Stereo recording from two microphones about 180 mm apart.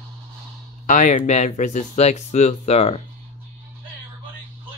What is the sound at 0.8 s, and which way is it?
Speech, 45° left (ahead or behind).